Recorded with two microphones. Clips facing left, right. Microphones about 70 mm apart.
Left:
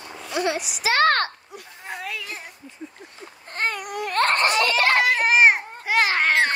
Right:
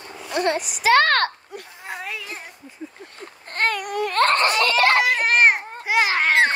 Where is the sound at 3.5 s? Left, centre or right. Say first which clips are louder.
Right 4 dB; right.